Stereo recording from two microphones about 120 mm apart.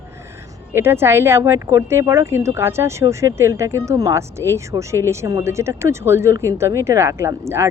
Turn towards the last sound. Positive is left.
turn(degrees=-20)  # may be behind; listen again after turning